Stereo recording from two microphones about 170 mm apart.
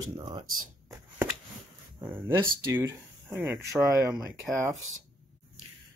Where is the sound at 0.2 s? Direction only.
25° right (ahead or behind).